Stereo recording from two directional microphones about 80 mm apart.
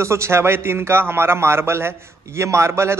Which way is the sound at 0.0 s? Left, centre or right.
Right.